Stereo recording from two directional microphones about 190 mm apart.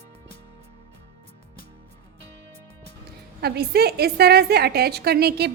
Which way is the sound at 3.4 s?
55° right (ahead or behind).